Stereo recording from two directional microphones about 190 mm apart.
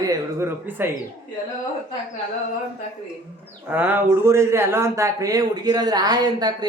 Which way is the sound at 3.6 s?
10° right (ahead or behind).